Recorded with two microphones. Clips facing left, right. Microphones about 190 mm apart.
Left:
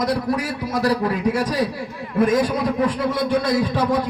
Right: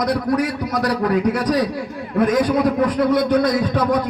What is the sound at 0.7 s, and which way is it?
Speech, 25° left (ahead or behind).